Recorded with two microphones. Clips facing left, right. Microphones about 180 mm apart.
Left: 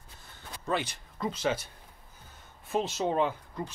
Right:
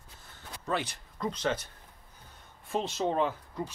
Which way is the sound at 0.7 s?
Centre (ahead or behind).